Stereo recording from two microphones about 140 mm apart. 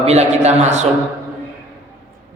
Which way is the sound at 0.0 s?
50° right (ahead or behind).